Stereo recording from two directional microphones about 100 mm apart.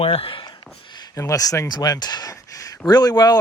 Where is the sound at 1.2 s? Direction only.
35° left (ahead or behind).